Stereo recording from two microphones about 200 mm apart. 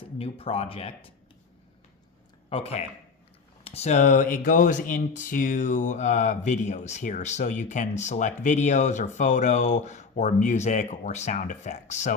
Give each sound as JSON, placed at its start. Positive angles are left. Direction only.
{"t": 0.0, "sound": "speech", "side_deg": 30}
{"t": 2.5, "sound": "speech", "side_deg": 30}